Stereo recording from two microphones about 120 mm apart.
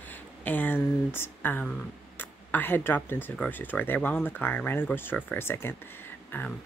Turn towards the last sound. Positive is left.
turn(degrees=15)  # may be behind; listen again after turning